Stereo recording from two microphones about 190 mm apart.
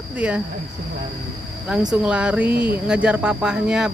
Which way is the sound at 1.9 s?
5° right (ahead or behind).